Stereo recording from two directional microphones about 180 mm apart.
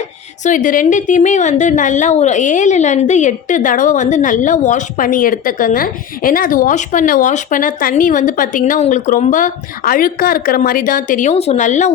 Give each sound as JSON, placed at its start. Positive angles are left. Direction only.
{"t": 0.4, "sound": "a woman's voice", "side_deg": 45}